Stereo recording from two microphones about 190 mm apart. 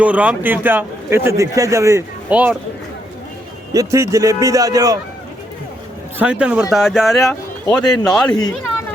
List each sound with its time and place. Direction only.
0.0 s a man's voice: 5° right (ahead or behind)
3.7 s a man's voice: 15° right (ahead or behind)
6.1 s speech: 5° right (ahead or behind)
7.2 s speech: 15° left (ahead or behind)
8.0 s speech: 5° left (ahead or behind)
8.3 s speech: 20° left (ahead or behind)